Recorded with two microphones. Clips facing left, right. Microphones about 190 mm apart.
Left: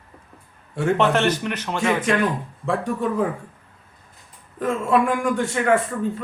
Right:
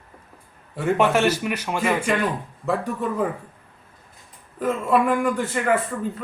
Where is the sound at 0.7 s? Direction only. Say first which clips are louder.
Even; 5° right (ahead or behind).